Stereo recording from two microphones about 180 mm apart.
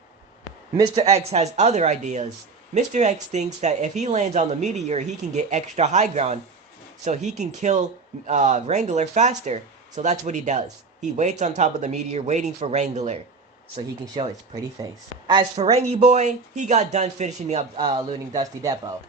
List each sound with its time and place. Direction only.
0.9 s speech: 35° right (ahead or behind)
13.7 s speech: 25° right (ahead or behind)
17.7 s speech: 30° right (ahead or behind)